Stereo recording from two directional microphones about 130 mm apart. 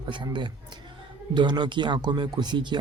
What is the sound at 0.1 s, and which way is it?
Speech, 40° right (ahead or behind).